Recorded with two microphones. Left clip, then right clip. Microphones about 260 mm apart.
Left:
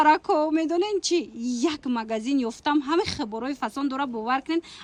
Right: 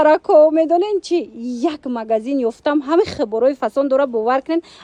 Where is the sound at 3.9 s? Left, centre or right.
Centre.